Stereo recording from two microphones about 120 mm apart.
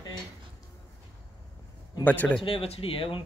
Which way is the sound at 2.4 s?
55° left (ahead or behind).